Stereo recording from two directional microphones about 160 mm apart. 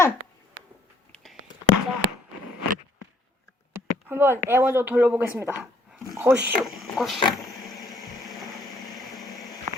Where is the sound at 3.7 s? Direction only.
15° right (ahead or behind).